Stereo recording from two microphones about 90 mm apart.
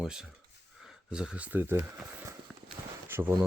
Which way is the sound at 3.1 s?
25° right (ahead or behind).